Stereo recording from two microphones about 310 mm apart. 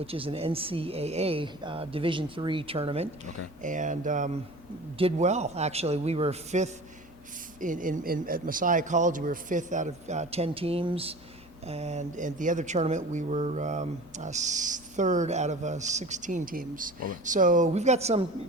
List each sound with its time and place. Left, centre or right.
0.0 s speech: centre